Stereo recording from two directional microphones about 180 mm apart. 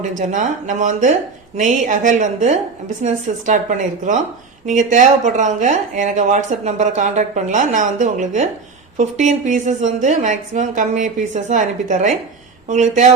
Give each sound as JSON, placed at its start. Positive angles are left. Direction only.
{"t": 0.0, "sound": "speech", "side_deg": -45}